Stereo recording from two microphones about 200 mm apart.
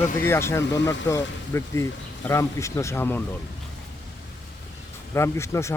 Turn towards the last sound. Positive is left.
turn(degrees=15)  # may be behind; listen again after turning